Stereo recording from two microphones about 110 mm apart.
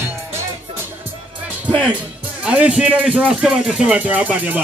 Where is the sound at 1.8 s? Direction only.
15° right (ahead or behind).